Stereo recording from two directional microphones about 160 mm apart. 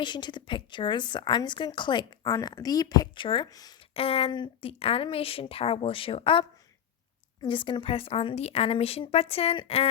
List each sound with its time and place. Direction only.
0.0 s a woman's voice: 30° left (ahead or behind)
3.9 s a woman's voice: 35° left (ahead or behind)
7.4 s a woman's voice: 30° left (ahead or behind)